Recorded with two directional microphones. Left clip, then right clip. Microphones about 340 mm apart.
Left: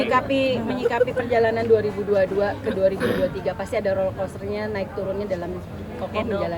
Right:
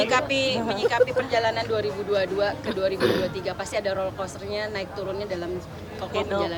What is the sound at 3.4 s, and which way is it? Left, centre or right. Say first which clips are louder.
Speech: left 3 dB; centre.